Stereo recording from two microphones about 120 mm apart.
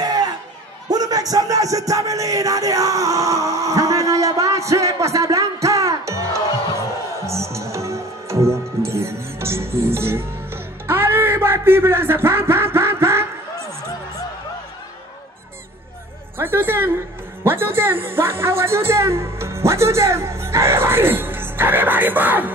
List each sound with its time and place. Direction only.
0.0 s chatter: 35° right (ahead or behind)
0.8 s music: 30° right (ahead or behind)
7.2 s music: 25° right (ahead or behind)
16.3 s a woman's voice: 20° right (ahead or behind)